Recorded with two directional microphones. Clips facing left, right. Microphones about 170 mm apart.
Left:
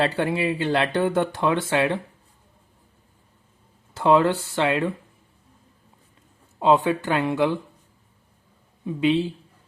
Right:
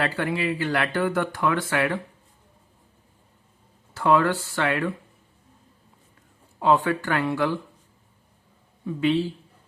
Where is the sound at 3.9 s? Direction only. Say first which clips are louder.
Left 2 dB; 25° left (ahead or behind).